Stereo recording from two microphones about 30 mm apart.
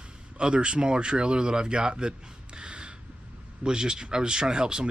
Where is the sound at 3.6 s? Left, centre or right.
Right.